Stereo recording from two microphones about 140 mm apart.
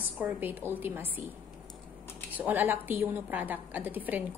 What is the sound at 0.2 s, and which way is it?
A woman's voice, 10° right (ahead or behind).